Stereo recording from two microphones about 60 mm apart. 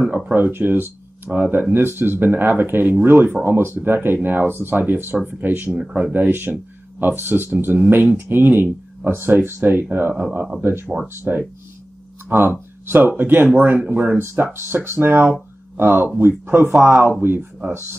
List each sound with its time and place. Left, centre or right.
0.1 s speech: right
5.8 s speech: centre
6.1 s speech: right
12.4 s speech: right